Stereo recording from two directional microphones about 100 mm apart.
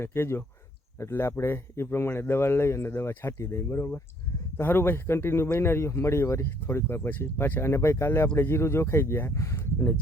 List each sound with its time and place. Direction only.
0.0 s speech: 25° left (ahead or behind)